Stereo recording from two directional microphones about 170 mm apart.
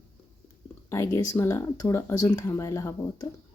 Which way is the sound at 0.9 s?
15° left (ahead or behind).